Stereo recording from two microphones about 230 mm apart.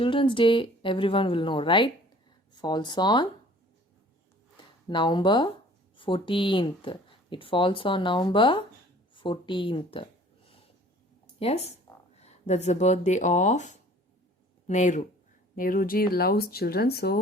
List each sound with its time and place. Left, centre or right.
0.0 s speech: left
4.9 s speech: centre
9.1 s a sound: left
11.3 s speech: left